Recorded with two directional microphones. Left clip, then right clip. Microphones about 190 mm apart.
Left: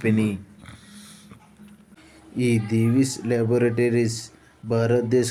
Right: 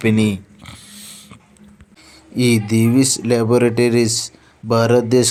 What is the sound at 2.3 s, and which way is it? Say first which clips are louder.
Speech: right 7 dB; 15° right (ahead or behind).